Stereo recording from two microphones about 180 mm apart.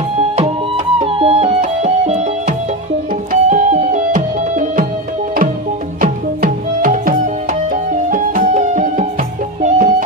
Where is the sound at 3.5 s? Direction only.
40° right (ahead or behind).